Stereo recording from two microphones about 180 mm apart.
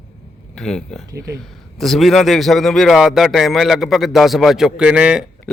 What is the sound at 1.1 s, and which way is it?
Speech, 15° right (ahead or behind).